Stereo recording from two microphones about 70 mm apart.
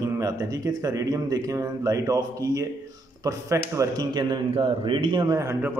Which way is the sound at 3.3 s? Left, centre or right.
Right.